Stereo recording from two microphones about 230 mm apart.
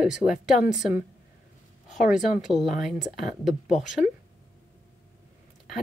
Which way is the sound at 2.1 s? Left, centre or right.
Centre.